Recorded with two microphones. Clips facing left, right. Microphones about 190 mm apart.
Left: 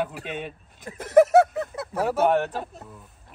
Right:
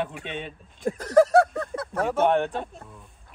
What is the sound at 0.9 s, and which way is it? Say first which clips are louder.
Speech: left 2 dB; 20° left (ahead or behind).